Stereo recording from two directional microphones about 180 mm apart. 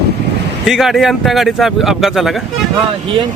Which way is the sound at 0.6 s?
Centre (ahead or behind).